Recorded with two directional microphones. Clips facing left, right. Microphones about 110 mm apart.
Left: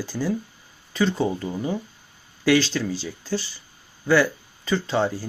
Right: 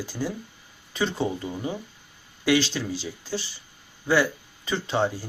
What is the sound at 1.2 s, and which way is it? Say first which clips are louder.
Speech: left 3 dB; 30° left (ahead or behind).